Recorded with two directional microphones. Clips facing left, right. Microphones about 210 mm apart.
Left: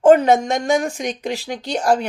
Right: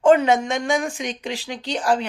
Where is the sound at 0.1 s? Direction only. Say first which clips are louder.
Left 3 dB; 40° left (ahead or behind).